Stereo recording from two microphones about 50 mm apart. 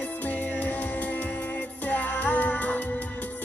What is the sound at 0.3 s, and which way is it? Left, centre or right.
Music, left.